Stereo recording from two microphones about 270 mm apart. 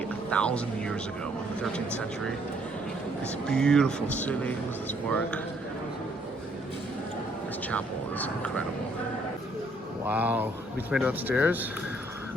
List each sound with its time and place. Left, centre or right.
0.3 s speech: centre
3.5 s speech: centre
7.7 s speech: centre
10.1 s speech: centre